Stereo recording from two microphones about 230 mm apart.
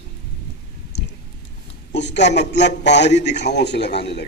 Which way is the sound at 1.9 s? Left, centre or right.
Left.